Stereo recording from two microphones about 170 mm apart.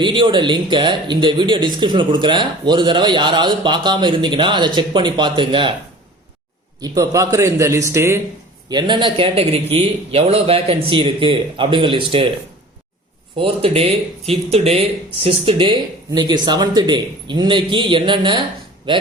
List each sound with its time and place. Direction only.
0.0 s speech: 30° right (ahead or behind)
6.8 s a man's voice: 20° right (ahead or behind)
8.7 s speech: 30° right (ahead or behind)
13.3 s speech: 30° right (ahead or behind)